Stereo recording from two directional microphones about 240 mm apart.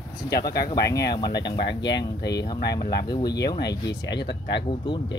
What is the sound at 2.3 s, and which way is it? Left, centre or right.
Speech, centre.